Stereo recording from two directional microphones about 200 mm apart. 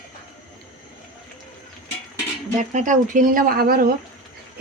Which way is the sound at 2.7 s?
40° right (ahead or behind).